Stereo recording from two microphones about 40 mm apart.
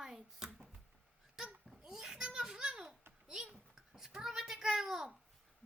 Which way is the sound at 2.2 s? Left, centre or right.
Right.